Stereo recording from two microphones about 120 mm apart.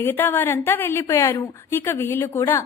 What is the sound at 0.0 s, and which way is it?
A woman's voice, 15° left (ahead or behind).